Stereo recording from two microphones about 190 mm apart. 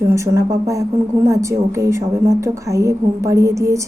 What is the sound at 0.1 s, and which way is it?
A woman's voice, 15° right (ahead or behind).